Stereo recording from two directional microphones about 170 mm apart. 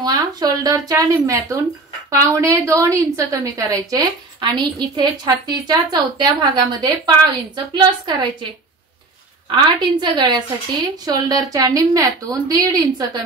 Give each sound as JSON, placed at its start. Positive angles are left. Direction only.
{"t": 0.0, "sound": "a woman's voice", "side_deg": -25}
{"t": 9.5, "sound": "a woman's voice", "side_deg": -25}